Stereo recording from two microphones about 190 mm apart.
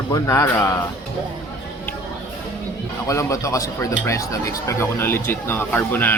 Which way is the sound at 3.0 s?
15° left (ahead or behind).